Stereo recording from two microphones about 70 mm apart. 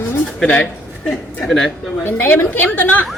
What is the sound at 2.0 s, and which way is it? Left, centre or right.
A woman's voice, left.